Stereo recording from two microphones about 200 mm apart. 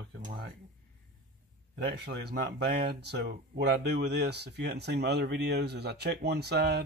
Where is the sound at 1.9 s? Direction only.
55° right (ahead or behind).